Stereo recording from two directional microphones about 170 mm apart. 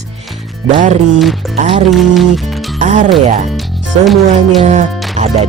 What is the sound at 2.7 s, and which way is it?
Speech, 45° right (ahead or behind).